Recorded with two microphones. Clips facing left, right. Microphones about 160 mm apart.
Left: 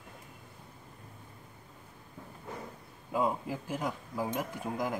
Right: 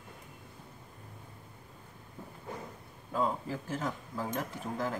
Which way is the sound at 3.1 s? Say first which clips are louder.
Left 1 dB; 15° left (ahead or behind).